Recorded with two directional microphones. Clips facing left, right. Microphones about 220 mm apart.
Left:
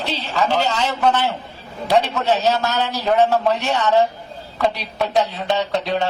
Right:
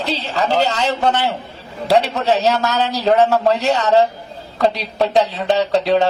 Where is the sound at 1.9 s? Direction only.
35° right (ahead or behind).